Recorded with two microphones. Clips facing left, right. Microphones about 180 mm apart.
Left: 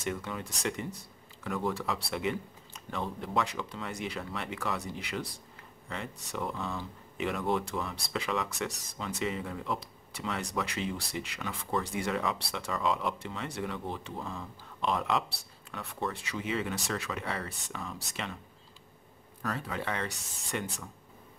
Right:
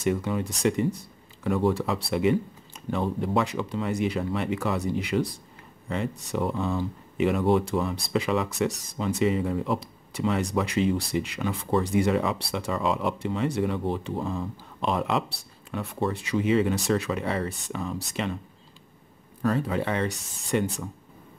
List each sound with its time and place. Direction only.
0.0 s speech: 20° right (ahead or behind)
1.4 s speech: 25° right (ahead or behind)
2.0 s speech: 15° right (ahead or behind)
19.4 s speech: 25° right (ahead or behind)